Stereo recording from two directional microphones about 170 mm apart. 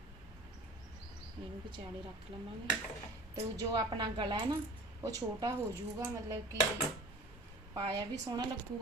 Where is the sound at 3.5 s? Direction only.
25° right (ahead or behind).